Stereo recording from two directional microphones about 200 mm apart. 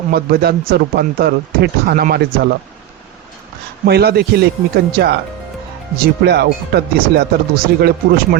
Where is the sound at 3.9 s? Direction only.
55° right (ahead or behind).